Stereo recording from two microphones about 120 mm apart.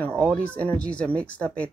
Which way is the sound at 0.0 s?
10° left (ahead or behind).